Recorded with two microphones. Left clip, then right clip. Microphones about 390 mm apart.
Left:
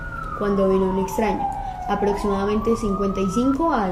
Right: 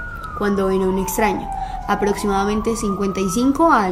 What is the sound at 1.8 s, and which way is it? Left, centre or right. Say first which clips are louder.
Speech: right 2 dB; right.